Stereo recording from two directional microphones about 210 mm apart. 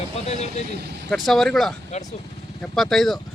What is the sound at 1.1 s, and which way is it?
Speech, centre (ahead or behind).